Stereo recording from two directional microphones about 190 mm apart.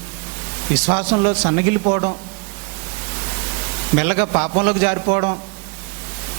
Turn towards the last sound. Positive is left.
turn(degrees=-30)  # may be behind; listen again after turning